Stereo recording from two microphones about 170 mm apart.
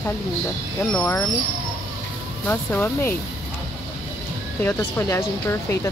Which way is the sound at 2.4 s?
10° left (ahead or behind).